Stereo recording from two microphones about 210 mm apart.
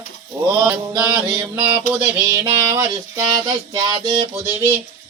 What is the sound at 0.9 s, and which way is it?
Mantra, 20° right (ahead or behind).